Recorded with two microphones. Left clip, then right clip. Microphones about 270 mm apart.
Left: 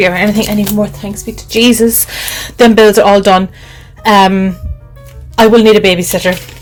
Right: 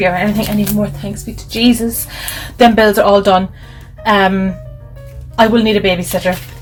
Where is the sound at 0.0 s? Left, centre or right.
Left.